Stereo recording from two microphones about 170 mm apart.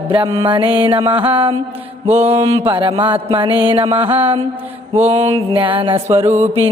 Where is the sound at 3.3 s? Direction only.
30° right (ahead or behind).